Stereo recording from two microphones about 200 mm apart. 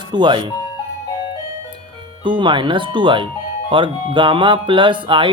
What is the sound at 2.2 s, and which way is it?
Speech, 25° right (ahead or behind).